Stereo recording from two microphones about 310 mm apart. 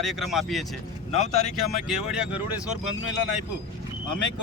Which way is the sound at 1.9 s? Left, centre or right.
Centre.